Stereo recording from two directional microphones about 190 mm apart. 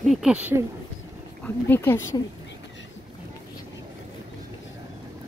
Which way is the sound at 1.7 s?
10° left (ahead or behind).